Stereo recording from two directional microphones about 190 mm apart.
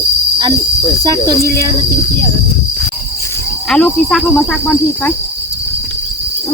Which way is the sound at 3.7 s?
5° left (ahead or behind).